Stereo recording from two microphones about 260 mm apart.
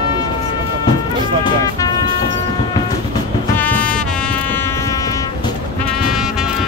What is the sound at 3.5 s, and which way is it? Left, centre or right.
Music, centre.